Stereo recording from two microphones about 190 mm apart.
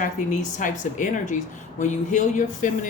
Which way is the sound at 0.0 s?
40° left (ahead or behind).